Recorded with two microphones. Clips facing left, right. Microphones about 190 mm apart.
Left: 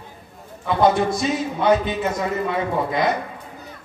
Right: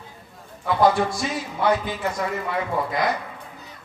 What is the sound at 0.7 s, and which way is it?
A man's voice, 20° left (ahead or behind).